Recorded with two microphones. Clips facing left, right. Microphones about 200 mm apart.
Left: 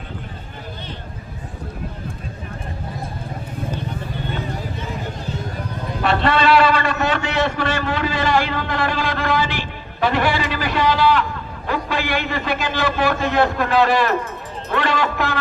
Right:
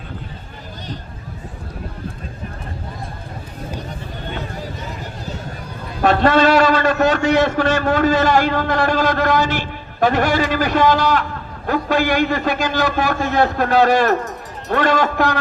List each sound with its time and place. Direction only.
6.0 s a man's voice: 45° right (ahead or behind)